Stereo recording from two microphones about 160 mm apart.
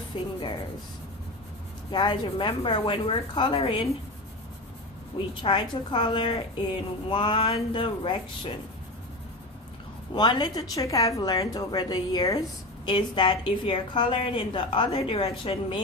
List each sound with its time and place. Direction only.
0.1 s a woman's voice: 30° left (ahead or behind)
1.9 s a woman's voice: 30° left (ahead or behind)
5.1 s a woman's voice: 30° left (ahead or behind)
10.2 s a woman's voice: 25° left (ahead or behind)